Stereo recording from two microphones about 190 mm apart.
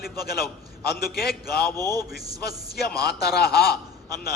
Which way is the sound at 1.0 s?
55° left (ahead or behind).